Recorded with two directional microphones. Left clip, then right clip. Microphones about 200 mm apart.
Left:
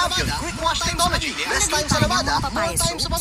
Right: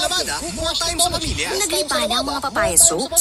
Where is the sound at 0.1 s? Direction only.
Centre (ahead or behind).